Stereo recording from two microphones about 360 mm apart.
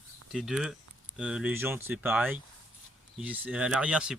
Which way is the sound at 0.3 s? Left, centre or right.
Centre.